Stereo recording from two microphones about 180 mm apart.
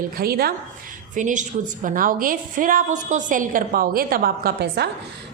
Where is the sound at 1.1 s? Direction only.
45° right (ahead or behind).